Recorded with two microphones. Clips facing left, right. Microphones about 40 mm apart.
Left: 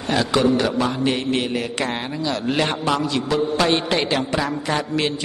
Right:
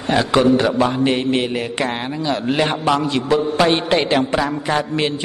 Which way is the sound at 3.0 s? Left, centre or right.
Right.